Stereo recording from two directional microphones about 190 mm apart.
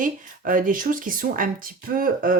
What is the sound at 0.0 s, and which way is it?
Speech, 45° right (ahead or behind).